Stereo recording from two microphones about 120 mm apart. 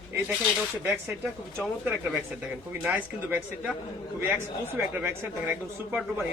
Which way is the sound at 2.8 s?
15° right (ahead or behind).